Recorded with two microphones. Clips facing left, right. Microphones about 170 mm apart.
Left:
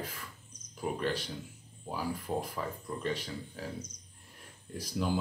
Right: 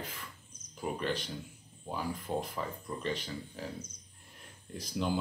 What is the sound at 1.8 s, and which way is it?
Speech, 5° left (ahead or behind).